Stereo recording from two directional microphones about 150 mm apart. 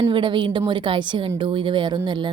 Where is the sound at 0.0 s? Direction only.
35° right (ahead or behind).